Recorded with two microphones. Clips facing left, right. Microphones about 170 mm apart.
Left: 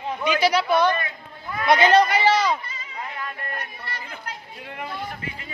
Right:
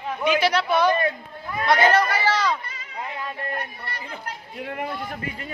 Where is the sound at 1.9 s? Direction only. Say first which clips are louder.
Left 4 dB; 20° left (ahead or behind).